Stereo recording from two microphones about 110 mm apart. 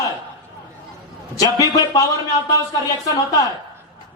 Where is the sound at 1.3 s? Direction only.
35° left (ahead or behind).